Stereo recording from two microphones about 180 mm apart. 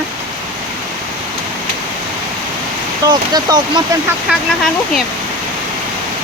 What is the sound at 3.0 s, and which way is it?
Speech, 20° right (ahead or behind).